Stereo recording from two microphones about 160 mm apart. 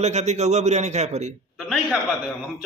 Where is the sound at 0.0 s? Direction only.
45° right (ahead or behind).